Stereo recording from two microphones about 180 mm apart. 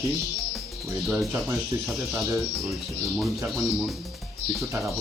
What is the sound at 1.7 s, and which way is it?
Speech, 20° right (ahead or behind).